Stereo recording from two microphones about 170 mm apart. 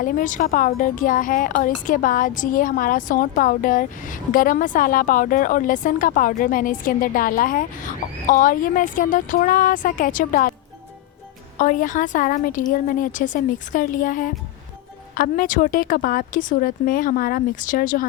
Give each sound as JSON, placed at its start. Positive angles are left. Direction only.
{"t": 0.0, "sound": "a woman's voice", "side_deg": 50}
{"t": 11.5, "sound": "a woman's voice", "side_deg": 50}